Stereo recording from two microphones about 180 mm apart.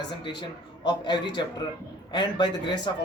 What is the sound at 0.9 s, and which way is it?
Speech, 25° left (ahead or behind).